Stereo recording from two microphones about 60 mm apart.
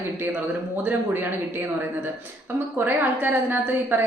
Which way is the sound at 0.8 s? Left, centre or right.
Right.